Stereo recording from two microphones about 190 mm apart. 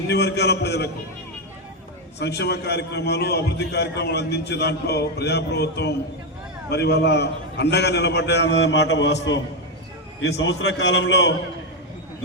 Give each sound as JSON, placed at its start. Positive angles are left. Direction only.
{"t": 0.1, "sound": "a man's voice", "side_deg": 60}
{"t": 2.1, "sound": "a man's voice", "side_deg": 60}
{"t": 10.2, "sound": "a man's voice", "side_deg": 70}